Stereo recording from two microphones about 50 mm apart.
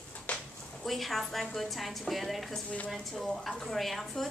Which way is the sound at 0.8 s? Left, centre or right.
Centre.